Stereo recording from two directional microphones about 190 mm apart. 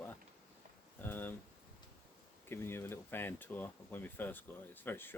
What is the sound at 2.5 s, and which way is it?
Speech, 10° left (ahead or behind).